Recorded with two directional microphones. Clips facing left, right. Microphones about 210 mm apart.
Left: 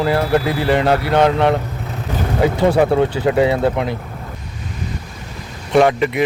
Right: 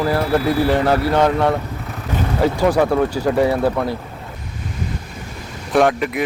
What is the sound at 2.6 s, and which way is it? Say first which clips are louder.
Speech: left 2 dB; 25° left (ahead or behind).